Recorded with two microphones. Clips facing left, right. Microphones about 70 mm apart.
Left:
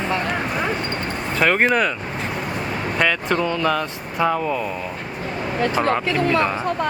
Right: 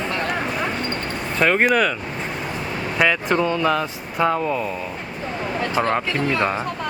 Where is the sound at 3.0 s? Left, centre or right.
Centre.